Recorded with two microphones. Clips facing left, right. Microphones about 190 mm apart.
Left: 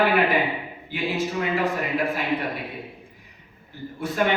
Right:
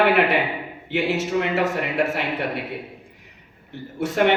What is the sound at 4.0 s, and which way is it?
Speech, 70° right (ahead or behind).